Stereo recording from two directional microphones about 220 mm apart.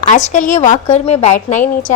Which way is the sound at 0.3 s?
35° left (ahead or behind).